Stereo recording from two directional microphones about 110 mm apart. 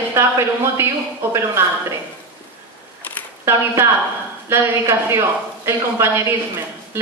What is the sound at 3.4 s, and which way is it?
A woman's voice, 25° right (ahead or behind).